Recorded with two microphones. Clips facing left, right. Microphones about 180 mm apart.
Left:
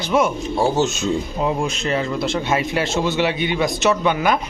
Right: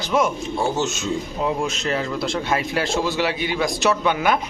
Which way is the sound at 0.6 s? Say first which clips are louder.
Left 5 dB; 35° left (ahead or behind).